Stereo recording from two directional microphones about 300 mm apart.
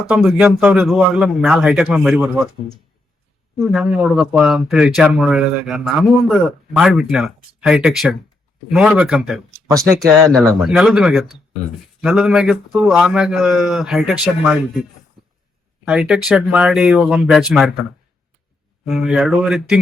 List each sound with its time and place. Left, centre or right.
0.1 s speech: centre
15.8 s speech: centre
18.9 s speech: centre